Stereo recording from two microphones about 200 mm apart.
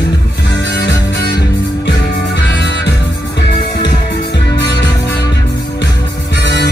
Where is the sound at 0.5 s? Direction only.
60° left (ahead or behind).